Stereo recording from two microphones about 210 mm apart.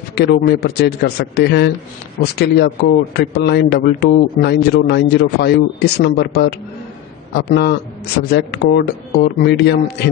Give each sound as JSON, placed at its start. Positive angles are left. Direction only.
{"t": 0.1, "sound": "speech", "side_deg": 50}